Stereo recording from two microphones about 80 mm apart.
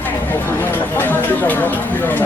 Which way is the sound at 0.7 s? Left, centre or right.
Left.